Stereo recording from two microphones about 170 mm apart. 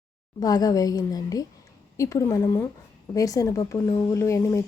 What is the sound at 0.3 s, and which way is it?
A woman's voice, 20° left (ahead or behind).